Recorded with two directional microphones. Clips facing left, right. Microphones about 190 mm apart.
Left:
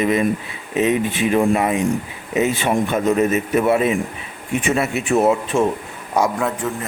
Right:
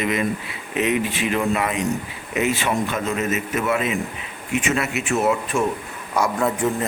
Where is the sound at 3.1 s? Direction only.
35° left (ahead or behind).